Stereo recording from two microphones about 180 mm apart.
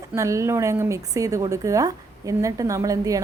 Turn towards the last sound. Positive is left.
turn(degrees=-20)  # may be behind; listen again after turning